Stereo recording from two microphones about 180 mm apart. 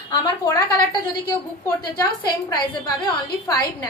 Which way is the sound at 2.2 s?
25° left (ahead or behind).